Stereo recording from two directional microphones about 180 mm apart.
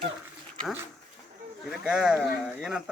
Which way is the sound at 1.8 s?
5° right (ahead or behind).